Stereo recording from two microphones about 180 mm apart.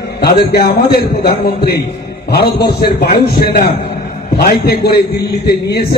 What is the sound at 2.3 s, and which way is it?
A man's voice, 60° left (ahead or behind).